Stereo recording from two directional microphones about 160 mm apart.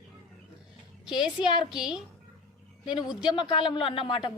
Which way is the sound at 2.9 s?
25° left (ahead or behind).